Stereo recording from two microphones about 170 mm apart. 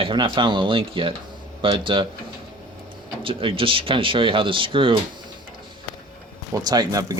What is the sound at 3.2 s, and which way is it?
Speech, 30° right (ahead or behind).